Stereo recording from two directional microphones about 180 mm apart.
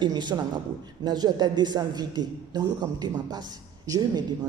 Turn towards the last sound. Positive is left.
turn(degrees=-20)  # may be behind; listen again after turning